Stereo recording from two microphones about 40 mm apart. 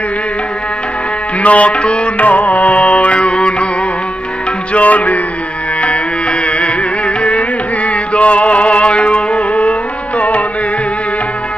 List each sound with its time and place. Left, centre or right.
1.4 s music: left
2.2 s music: left
4.7 s music: left
6.4 s music: left